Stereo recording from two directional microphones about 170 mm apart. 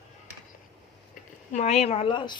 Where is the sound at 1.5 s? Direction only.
40° left (ahead or behind).